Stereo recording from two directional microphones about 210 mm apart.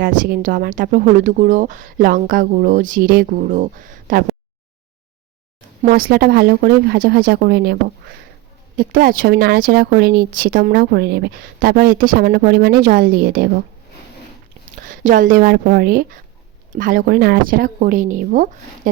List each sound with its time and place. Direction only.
0.0 s speech: 40° right (ahead or behind)
5.8 s a woman's voice: 40° right (ahead or behind)
8.8 s a woman's voice: 40° right (ahead or behind)
15.0 s speech: 40° right (ahead or behind)